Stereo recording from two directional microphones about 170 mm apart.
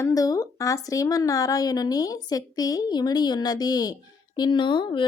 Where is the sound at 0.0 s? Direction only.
20° left (ahead or behind).